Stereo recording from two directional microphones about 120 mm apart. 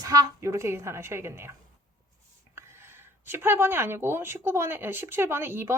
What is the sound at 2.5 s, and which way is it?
Speech, 20° right (ahead or behind).